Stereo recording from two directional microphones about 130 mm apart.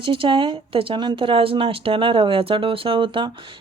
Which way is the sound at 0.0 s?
40° right (ahead or behind).